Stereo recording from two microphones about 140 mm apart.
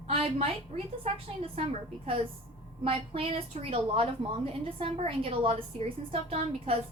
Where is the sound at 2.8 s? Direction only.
40° right (ahead or behind).